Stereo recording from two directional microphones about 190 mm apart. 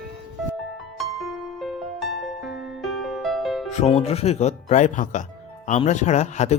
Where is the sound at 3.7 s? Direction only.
35° left (ahead or behind).